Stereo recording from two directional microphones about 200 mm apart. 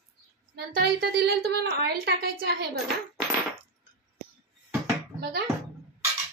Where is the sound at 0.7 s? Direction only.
50° right (ahead or behind).